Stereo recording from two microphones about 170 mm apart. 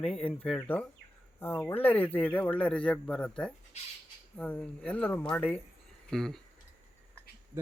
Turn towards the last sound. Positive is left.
turn(degrees=0)  # may be behind; listen again after turning